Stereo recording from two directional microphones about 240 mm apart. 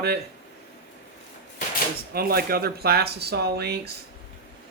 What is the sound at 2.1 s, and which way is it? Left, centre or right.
Speech, right.